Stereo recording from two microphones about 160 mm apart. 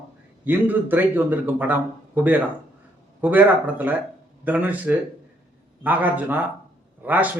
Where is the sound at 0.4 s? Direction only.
10° right (ahead or behind).